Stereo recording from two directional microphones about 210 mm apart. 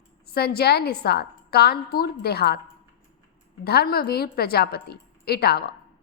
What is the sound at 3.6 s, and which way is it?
A woman's voice, 50° left (ahead or behind).